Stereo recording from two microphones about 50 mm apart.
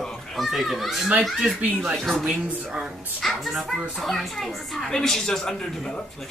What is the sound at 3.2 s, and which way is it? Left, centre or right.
Speech, centre.